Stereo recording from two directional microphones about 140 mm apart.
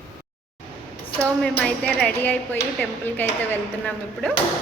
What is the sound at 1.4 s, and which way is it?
Speech, 5° left (ahead or behind).